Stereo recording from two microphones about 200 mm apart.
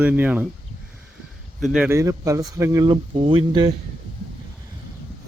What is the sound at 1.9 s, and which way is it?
Speech, 15° right (ahead or behind).